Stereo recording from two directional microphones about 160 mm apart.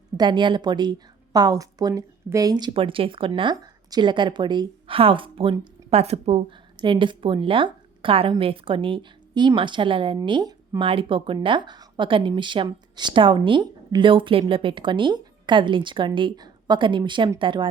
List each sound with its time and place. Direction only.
0.2 s a woman's voice: 30° right (ahead or behind)
6.7 s a woman's voice: 30° right (ahead or behind)